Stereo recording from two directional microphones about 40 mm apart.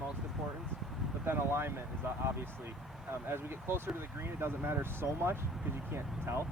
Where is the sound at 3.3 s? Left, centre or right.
Right.